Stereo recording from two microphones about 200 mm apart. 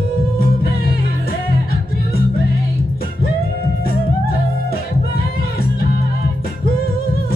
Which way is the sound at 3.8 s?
50° left (ahead or behind).